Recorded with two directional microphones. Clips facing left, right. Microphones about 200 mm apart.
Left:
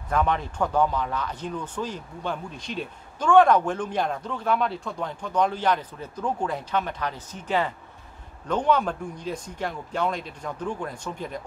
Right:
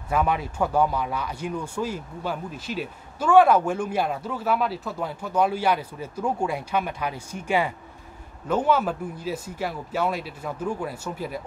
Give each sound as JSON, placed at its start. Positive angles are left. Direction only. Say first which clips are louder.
{"t": 0.1, "sound": "speech", "louder": "right 1 dB", "side_deg": -10}